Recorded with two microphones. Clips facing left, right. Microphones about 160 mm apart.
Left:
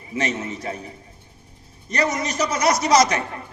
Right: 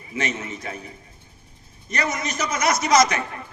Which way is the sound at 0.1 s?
35° left (ahead or behind).